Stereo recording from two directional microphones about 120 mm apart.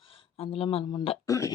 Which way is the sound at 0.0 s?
50° left (ahead or behind).